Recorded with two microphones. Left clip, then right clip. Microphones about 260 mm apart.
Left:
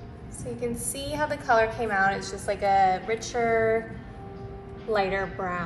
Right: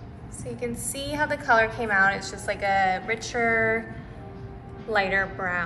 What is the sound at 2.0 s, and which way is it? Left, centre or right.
Speech, centre.